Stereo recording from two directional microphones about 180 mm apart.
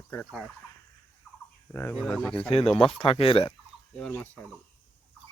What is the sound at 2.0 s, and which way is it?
Speech, 5° left (ahead or behind).